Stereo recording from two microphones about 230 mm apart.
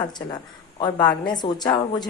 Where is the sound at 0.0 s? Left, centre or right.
Centre.